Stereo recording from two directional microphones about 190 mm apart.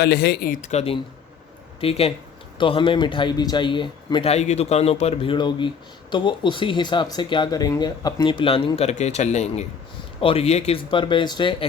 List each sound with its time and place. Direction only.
0.0 s speech: 55° left (ahead or behind); by 11.5 s 25° left (ahead or behind)